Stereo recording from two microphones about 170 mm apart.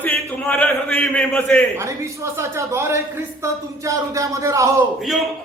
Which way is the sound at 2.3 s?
15° right (ahead or behind).